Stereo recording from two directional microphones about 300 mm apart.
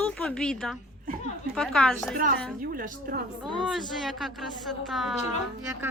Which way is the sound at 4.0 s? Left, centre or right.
Centre.